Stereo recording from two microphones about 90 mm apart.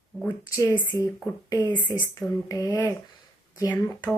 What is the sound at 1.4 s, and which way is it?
Speech, 50° left (ahead or behind).